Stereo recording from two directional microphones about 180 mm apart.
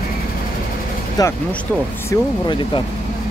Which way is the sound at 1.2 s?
20° left (ahead or behind).